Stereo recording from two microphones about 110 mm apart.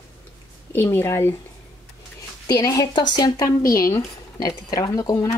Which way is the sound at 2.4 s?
30° left (ahead or behind).